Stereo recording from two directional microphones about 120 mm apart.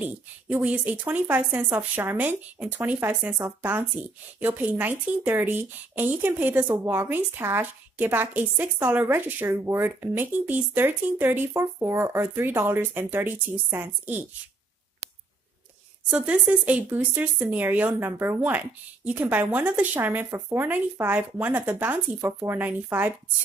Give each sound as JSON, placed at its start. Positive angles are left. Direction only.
{"t": 0.0, "sound": "a woman's voice", "side_deg": -15}
{"t": 16.1, "sound": "a woman's voice", "side_deg": -10}